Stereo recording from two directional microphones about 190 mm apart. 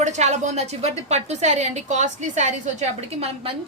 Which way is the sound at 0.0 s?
35° right (ahead or behind).